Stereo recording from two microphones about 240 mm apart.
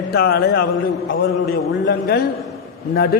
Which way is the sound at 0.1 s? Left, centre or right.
Left.